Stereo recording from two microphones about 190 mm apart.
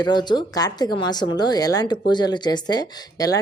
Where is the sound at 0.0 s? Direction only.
20° left (ahead or behind).